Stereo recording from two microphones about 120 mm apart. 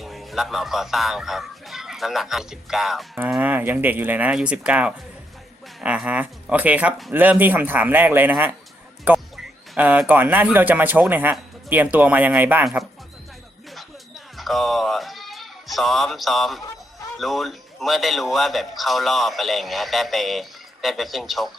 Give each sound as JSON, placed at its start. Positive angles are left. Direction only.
{"t": 0.0, "sound": "a man's voice", "side_deg": 0}
{"t": 3.2, "sound": "speech", "side_deg": -10}
{"t": 14.3, "sound": "a man's voice", "side_deg": 0}